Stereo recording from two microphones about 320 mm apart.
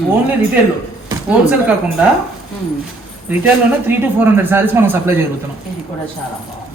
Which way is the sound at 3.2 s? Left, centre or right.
Centre.